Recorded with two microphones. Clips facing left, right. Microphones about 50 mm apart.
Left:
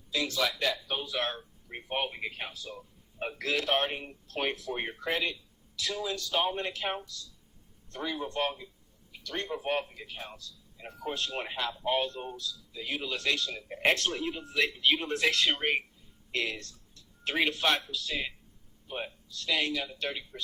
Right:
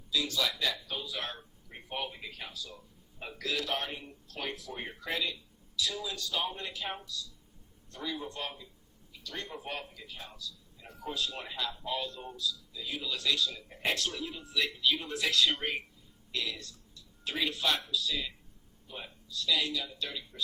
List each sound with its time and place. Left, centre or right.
0.1 s speech: left
9.5 s a man's voice: left